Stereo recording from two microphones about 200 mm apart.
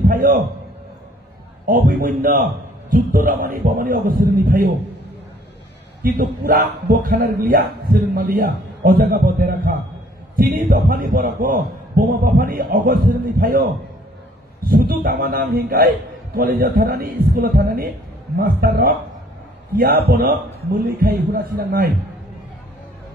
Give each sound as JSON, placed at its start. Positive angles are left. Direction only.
{"t": 0.1, "sound": "a man's voice", "side_deg": -45}
{"t": 1.7, "sound": "a man's voice", "side_deg": -45}
{"t": 6.1, "sound": "a man's voice", "side_deg": -45}
{"t": 14.6, "sound": "a man's voice", "side_deg": -50}
{"t": 20.1, "sound": "a man's voice", "side_deg": -50}